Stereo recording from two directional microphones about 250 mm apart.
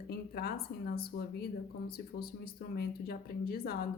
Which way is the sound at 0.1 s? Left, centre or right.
Left.